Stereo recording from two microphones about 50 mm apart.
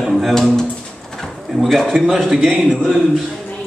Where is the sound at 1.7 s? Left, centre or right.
Centre.